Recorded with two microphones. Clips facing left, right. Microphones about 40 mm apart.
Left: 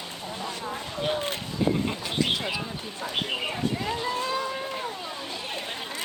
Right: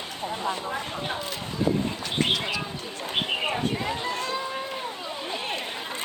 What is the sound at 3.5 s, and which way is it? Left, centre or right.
Speech, centre.